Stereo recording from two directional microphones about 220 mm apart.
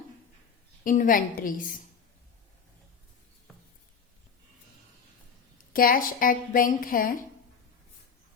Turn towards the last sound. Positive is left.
turn(degrees=40)  # may be behind; listen again after turning